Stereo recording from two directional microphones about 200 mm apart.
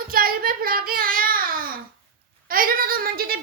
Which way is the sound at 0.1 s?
45° right (ahead or behind).